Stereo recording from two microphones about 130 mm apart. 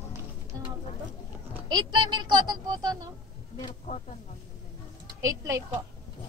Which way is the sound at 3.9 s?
55° left (ahead or behind).